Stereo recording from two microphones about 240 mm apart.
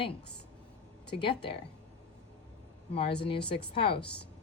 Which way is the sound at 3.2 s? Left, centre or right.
Left.